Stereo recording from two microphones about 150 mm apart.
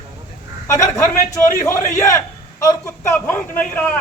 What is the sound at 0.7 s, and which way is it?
A man's voice, 20° left (ahead or behind).